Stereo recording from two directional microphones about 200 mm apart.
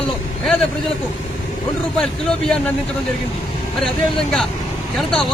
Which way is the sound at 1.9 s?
Centre (ahead or behind).